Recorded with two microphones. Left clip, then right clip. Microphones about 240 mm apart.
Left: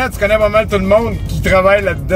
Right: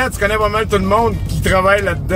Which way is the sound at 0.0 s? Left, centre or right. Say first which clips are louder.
Left 3 dB; centre.